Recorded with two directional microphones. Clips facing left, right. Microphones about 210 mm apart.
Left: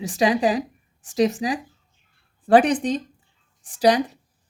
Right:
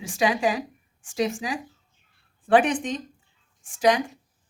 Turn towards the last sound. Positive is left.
turn(degrees=35)  # may be behind; listen again after turning